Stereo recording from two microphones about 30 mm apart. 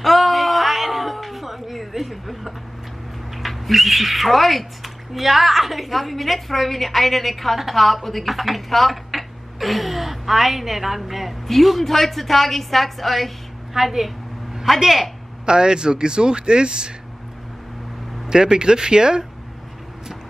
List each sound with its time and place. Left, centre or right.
0.0 s cat: centre
3.3 s speech: centre
15.4 s speech: right
18.2 s speech: right